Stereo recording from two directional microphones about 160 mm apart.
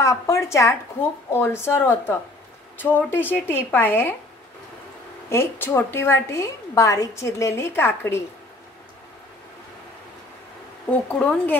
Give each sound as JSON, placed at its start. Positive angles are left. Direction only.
{"t": 0.0, "sound": "a woman's voice", "side_deg": 20}
{"t": 5.3, "sound": "a woman's voice", "side_deg": 15}
{"t": 10.9, "sound": "a woman's voice", "side_deg": 10}